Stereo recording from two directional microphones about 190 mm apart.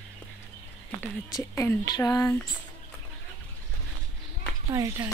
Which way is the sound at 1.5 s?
15° left (ahead or behind).